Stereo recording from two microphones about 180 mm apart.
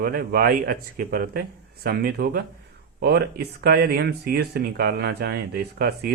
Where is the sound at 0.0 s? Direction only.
55° right (ahead or behind).